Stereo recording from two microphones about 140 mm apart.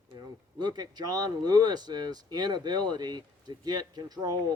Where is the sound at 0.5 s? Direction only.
30° right (ahead or behind).